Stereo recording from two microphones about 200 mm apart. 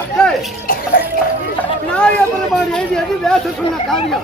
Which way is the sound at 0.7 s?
45° left (ahead or behind).